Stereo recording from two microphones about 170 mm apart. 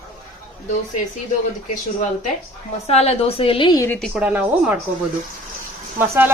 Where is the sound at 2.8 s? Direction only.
40° left (ahead or behind).